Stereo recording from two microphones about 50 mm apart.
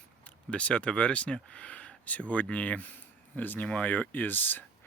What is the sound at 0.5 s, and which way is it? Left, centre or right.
Speech, left.